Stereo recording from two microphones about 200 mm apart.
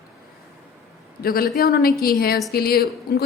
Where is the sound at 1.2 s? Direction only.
45° left (ahead or behind).